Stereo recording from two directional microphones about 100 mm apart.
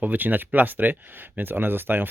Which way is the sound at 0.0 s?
20° right (ahead or behind).